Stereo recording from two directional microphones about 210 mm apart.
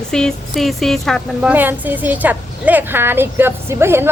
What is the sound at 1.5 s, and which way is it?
A woman's voice, 10° right (ahead or behind).